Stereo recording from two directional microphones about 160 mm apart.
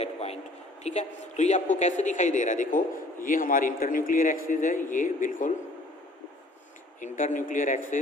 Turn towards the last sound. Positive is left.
turn(degrees=55)  # may be behind; listen again after turning